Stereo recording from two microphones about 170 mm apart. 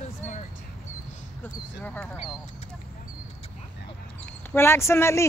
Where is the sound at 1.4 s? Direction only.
10° left (ahead or behind).